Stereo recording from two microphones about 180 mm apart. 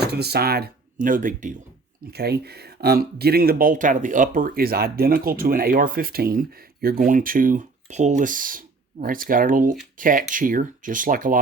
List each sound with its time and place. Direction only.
0.0 s speech: 65° right (ahead or behind); by 1.5 s 45° right (ahead or behind)
2.0 s speech: 60° right (ahead or behind)